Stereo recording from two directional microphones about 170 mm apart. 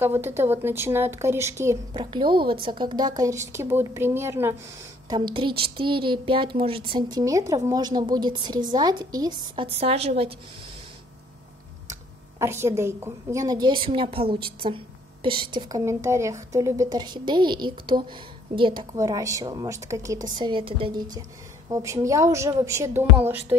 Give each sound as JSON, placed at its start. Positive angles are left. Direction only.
{"t": 0.0, "sound": "speech", "side_deg": -15}
{"t": 2.0, "sound": "a woman's voice", "side_deg": -30}
{"t": 5.1, "sound": "a woman's voice", "side_deg": -30}
{"t": 9.8, "sound": "a woman's voice", "side_deg": -35}
{"t": 11.9, "sound": "a woman's voice", "side_deg": -15}
{"t": 15.8, "sound": "a woman's voice", "side_deg": -15}